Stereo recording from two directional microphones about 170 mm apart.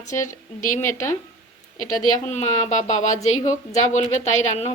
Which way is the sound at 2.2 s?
45° left (ahead or behind).